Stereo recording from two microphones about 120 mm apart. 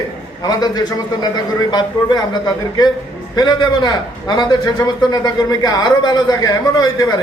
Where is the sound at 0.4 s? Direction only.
35° left (ahead or behind).